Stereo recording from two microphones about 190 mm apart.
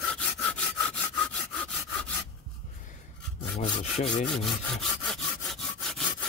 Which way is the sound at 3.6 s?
35° left (ahead or behind).